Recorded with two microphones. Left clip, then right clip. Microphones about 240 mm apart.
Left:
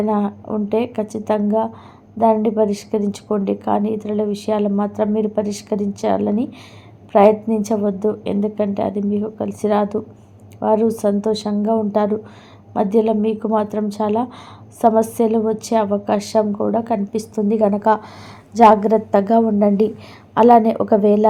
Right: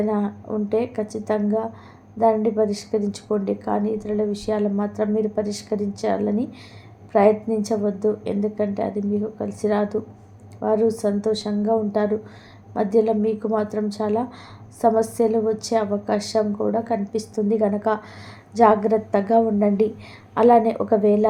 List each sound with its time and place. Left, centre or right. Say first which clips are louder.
0.0 s a woman's voice: left 4 dB; centre